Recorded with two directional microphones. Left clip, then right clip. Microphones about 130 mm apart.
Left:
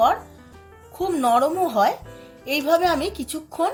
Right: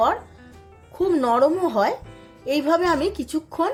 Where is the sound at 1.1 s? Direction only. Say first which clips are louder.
Left 3 dB; 55° right (ahead or behind).